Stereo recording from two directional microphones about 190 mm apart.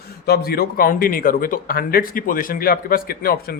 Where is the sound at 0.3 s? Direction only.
55° left (ahead or behind).